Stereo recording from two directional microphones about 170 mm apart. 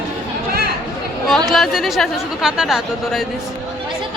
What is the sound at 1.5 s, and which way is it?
Speech, centre (ahead or behind).